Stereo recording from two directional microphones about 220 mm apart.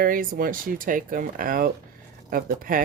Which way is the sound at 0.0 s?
40° right (ahead or behind).